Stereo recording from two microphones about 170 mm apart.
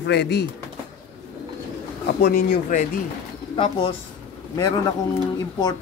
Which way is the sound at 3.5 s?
35° left (ahead or behind).